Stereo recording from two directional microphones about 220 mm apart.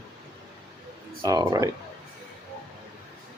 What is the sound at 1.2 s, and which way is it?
Speech, 15° right (ahead or behind).